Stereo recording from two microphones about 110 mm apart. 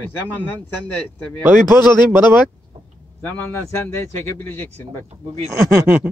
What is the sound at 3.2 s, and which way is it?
A man's voice, 20° left (ahead or behind).